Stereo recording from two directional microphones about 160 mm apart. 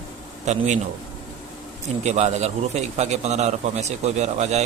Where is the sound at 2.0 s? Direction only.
45° right (ahead or behind).